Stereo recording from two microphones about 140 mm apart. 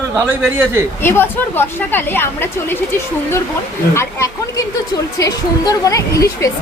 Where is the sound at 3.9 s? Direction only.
20° left (ahead or behind).